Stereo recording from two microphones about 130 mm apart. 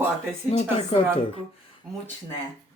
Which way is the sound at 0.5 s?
55° left (ahead or behind).